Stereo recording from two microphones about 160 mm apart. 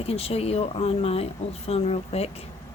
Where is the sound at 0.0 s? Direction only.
40° left (ahead or behind).